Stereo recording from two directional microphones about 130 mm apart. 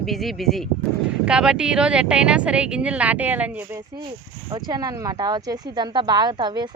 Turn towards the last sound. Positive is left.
turn(degrees=-35)  # may be behind; listen again after turning